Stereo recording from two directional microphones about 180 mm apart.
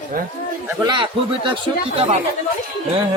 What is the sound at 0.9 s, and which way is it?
Speech, 25° right (ahead or behind).